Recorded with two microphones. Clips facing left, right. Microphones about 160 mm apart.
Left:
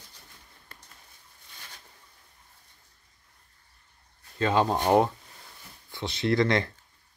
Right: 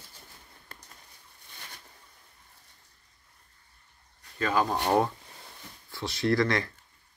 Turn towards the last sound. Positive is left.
turn(degrees=20)  # may be behind; listen again after turning